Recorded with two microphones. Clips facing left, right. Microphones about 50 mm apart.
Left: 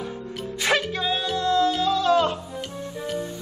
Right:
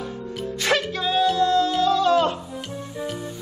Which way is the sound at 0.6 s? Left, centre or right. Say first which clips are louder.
Even; centre.